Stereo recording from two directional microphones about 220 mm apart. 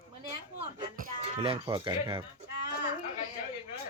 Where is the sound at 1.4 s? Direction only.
20° right (ahead or behind).